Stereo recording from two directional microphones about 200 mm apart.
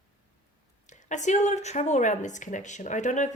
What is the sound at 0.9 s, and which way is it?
Speech, 35° left (ahead or behind).